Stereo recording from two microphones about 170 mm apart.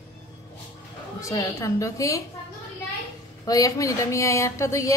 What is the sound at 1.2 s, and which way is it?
A woman's voice, 20° left (ahead or behind).